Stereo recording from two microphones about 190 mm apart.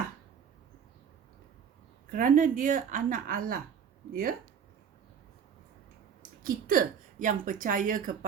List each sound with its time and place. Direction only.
2.0 s a woman's voice: 45° right (ahead or behind)
6.4 s a woman's voice: 45° right (ahead or behind)